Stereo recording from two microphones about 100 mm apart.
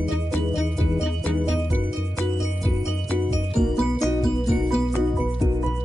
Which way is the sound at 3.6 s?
5° left (ahead or behind).